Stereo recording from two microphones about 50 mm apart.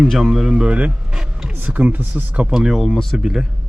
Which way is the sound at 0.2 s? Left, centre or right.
Centre.